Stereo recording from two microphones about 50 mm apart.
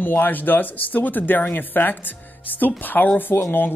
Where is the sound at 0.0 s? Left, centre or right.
Left.